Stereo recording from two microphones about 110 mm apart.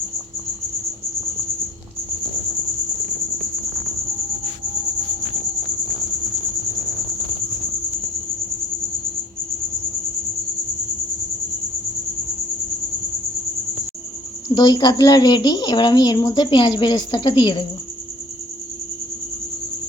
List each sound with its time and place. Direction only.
14.5 s a woman's voice: 45° left (ahead or behind)